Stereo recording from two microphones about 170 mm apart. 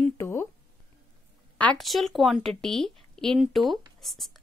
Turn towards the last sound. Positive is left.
turn(degrees=0)  # may be behind; listen again after turning